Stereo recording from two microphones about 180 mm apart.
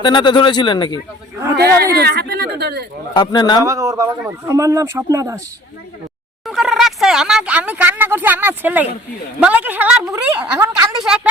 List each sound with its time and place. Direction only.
0.0 s speech: 25° left (ahead or behind)
1.5 s speech: 60° right (ahead or behind)
3.2 s speech: 25° left (ahead or behind)
3.6 s speech: 15° right (ahead or behind)
6.4 s speech: centre (ahead or behind)